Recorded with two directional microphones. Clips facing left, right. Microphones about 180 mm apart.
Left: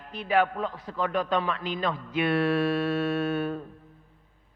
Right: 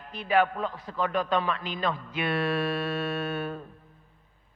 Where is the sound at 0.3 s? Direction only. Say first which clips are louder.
Even; 15° left (ahead or behind).